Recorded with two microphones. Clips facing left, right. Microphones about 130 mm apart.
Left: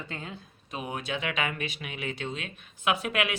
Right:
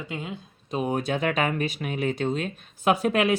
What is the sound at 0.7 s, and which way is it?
Speech, 40° right (ahead or behind).